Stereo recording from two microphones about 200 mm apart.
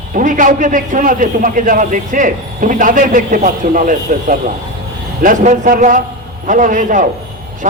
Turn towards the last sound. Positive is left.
turn(degrees=-40)  # may be behind; listen again after turning